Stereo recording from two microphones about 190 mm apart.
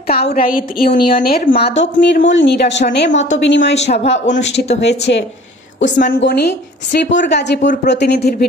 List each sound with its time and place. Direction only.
0.0 s a woman's voice: 55° left (ahead or behind)
1.7 s a woman's voice: 70° left (ahead or behind)
4.0 s speech: 35° left (ahead or behind)
4.7 s a woman's voice: 65° left (ahead or behind)